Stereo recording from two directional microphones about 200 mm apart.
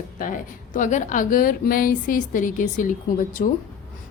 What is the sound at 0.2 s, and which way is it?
A woman's voice, 40° left (ahead or behind).